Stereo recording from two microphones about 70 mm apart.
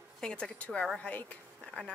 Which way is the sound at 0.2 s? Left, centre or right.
Centre.